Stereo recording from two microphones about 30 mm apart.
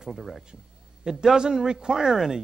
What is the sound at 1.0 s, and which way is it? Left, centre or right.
Speech, centre.